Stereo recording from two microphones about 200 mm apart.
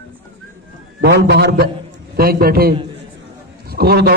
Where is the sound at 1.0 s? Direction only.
55° right (ahead or behind).